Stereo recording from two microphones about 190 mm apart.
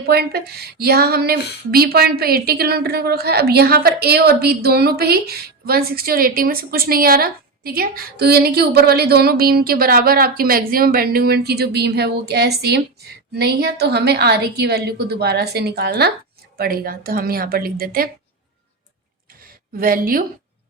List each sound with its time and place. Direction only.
0.1 s a woman's voice: 55° right (ahead or behind)
19.5 s a woman's voice: 50° right (ahead or behind)